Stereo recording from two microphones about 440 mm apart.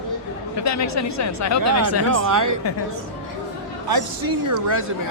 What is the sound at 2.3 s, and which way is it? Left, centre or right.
Speech, right.